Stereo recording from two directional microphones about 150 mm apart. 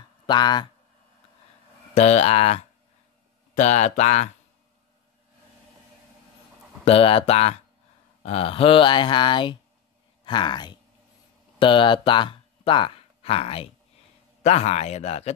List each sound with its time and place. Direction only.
0.3 s speech: 30° left (ahead or behind)
2.0 s speech: 45° left (ahead or behind)
6.8 s speech: 40° left (ahead or behind)